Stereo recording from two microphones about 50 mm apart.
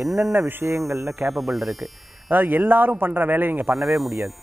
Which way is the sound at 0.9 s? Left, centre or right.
Right.